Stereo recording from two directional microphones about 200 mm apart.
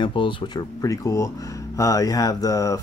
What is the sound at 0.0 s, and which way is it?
Speech, 25° left (ahead or behind).